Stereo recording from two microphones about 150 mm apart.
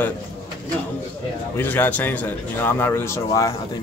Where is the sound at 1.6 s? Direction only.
10° left (ahead or behind).